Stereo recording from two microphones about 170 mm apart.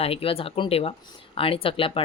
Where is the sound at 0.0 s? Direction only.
35° left (ahead or behind).